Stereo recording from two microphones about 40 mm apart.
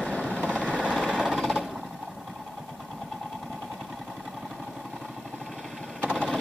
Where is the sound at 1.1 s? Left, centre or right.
Centre.